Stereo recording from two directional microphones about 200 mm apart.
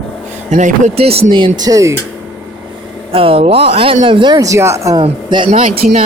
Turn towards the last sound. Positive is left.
turn(degrees=-30)  # may be behind; listen again after turning